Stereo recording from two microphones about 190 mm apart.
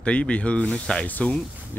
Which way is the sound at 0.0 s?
5° left (ahead or behind).